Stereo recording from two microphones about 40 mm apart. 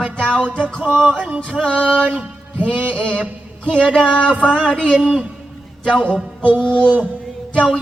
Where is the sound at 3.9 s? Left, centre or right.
Left.